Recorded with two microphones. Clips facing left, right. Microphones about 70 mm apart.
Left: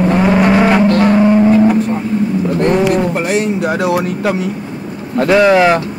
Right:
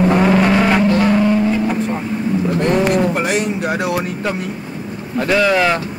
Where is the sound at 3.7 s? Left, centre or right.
Left.